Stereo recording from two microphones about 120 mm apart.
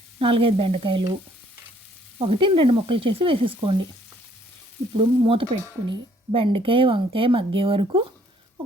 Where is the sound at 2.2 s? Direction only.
50° right (ahead or behind).